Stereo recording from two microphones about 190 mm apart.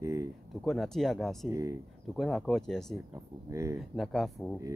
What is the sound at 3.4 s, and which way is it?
Speech, 15° right (ahead or behind).